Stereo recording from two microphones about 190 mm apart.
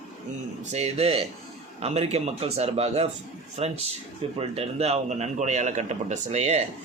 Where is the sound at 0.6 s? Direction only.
35° right (ahead or behind).